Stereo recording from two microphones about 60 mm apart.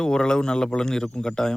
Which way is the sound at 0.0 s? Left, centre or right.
Centre.